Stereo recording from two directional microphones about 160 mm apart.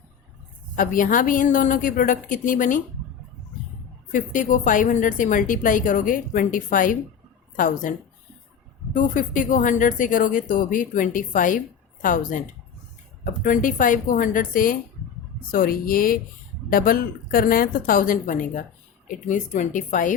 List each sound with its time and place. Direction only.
0.8 s a woman's voice: 60° left (ahead or behind)
4.1 s a woman's voice: 55° left (ahead or behind)